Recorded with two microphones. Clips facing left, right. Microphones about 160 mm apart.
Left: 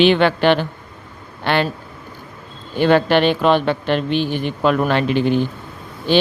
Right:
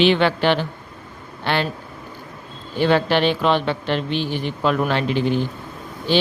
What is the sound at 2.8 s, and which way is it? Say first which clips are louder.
A man's voice: left 3 dB; 55° left (ahead or behind).